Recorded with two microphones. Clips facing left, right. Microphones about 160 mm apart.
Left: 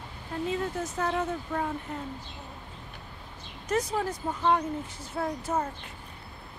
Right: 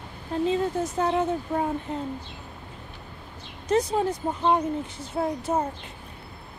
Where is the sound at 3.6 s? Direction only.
25° right (ahead or behind).